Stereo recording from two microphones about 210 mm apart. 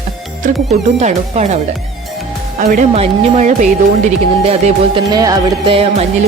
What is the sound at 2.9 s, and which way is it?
Speech, 30° right (ahead or behind).